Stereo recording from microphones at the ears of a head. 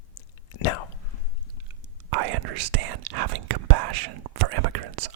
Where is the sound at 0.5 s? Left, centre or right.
Left.